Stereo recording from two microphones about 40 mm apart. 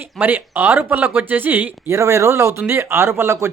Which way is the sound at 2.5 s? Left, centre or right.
Right.